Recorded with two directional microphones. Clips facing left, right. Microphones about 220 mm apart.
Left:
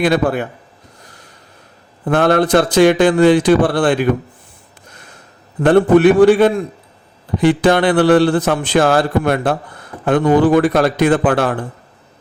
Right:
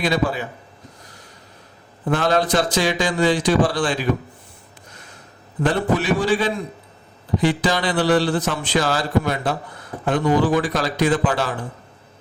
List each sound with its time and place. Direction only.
0.0 s speech: 55° left (ahead or behind)
2.0 s speech: 55° left (ahead or behind)
5.6 s speech: 55° left (ahead or behind)